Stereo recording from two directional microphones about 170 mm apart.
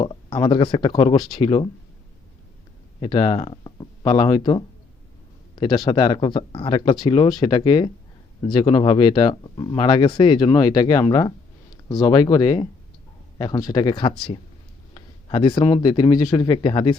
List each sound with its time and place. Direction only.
0.0 s speech: 30° left (ahead or behind)
3.0 s speech: 30° left (ahead or behind)